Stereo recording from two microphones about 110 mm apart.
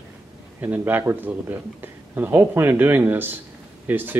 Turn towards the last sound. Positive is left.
turn(degrees=-20)  # may be behind; listen again after turning